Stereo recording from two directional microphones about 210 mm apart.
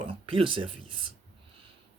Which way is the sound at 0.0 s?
25° right (ahead or behind).